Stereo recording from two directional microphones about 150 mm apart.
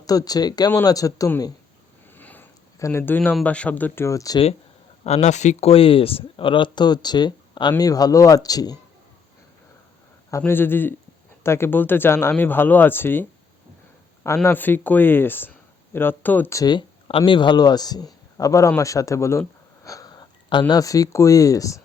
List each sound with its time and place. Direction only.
0.0 s speech: 25° left (ahead or behind)
2.1 s a sound: 10° left (ahead or behind)
3.0 s speech: 10° left (ahead or behind)
5.0 s speech: 45° left (ahead or behind); by 8.8 s 25° left (ahead or behind)
10.3 s speech: 15° left (ahead or behind)
14.4 s speech: 15° left (ahead or behind)